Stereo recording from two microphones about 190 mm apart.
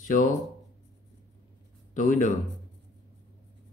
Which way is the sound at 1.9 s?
40° left (ahead or behind).